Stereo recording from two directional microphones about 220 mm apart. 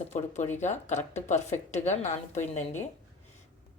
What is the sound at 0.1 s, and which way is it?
Speech, 30° left (ahead or behind).